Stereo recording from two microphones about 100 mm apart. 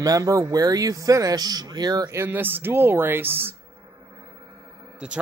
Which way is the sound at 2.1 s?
20° right (ahead or behind).